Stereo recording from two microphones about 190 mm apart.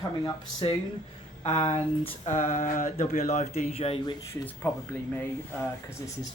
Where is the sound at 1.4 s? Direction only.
35° left (ahead or behind).